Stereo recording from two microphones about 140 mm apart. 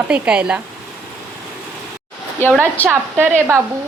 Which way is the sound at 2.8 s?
15° right (ahead or behind).